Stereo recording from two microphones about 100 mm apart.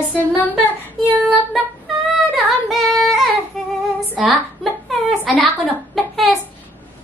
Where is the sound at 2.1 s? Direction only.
Centre (ahead or behind).